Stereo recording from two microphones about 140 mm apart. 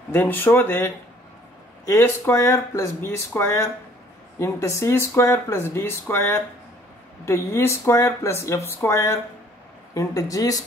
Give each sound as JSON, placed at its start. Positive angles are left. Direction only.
{"t": 0.1, "sound": "speech", "side_deg": 15}